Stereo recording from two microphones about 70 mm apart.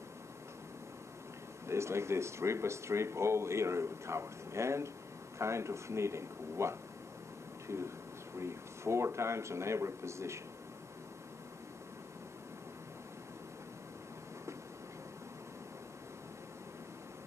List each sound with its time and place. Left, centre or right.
1.7 s speech: right